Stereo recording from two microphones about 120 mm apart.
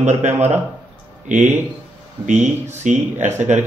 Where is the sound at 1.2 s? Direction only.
90° right.